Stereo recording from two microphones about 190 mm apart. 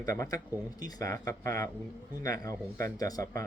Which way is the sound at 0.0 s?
15° left (ahead or behind).